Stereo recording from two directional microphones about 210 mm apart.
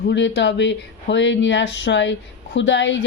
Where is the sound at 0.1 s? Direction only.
60° left (ahead or behind).